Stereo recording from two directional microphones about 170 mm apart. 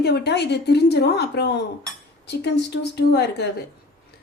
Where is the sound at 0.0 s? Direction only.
75° left (ahead or behind).